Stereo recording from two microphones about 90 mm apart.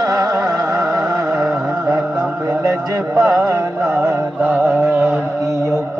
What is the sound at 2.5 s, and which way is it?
Music, 35° right (ahead or behind).